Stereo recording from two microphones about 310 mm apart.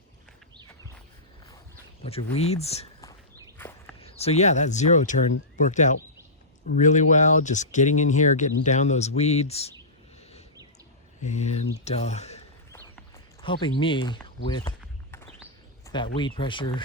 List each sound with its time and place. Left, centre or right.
2.0 s speech: centre
3.6 s walk: centre
4.0 s speech: centre
11.2 s speech: left
13.4 s speech: centre
15.9 s speech: centre